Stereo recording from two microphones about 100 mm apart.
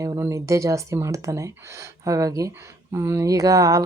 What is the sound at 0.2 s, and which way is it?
Speech, 30° right (ahead or behind).